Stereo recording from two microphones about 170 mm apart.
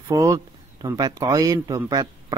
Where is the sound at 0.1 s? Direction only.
20° right (ahead or behind).